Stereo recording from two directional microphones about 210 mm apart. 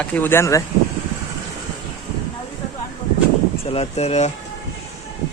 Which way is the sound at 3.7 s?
30° left (ahead or behind).